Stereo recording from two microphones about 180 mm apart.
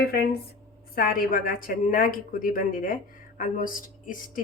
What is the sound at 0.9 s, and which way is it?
A woman's voice, 50° left (ahead or behind).